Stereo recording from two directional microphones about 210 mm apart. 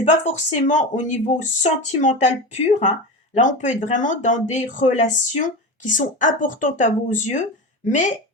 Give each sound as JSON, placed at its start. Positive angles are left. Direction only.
{"t": 0.0, "sound": "speech", "side_deg": 35}